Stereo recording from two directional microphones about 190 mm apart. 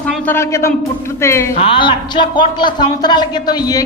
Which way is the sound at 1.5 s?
30° left (ahead or behind).